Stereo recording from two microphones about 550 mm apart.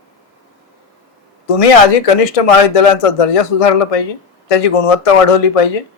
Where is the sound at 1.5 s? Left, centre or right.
Left.